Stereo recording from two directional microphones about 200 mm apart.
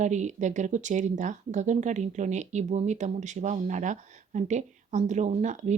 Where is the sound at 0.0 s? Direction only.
35° right (ahead or behind).